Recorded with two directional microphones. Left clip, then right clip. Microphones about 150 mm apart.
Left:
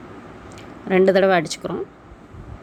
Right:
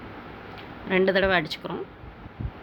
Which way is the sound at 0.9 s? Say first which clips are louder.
Left 6 dB; 35° left (ahead or behind).